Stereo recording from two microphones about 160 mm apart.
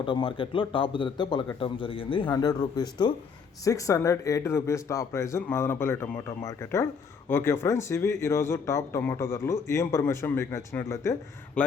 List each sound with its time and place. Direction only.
0.0 s a man's voice: 30° left (ahead or behind); by 11.7 s 10° left (ahead or behind)